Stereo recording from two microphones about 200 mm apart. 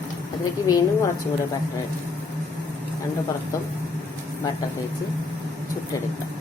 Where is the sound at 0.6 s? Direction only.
15° left (ahead or behind).